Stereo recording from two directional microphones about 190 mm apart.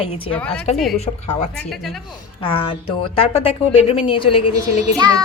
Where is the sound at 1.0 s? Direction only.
35° left (ahead or behind).